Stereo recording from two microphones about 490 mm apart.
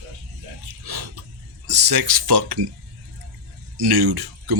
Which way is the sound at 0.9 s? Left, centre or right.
Right.